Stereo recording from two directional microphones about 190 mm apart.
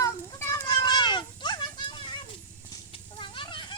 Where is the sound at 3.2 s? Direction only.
25° left (ahead or behind).